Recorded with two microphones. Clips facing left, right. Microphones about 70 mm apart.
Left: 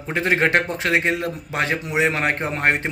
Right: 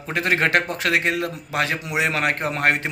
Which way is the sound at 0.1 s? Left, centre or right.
Left.